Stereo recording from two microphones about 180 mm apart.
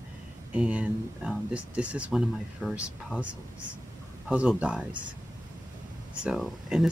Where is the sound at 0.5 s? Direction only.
5° right (ahead or behind).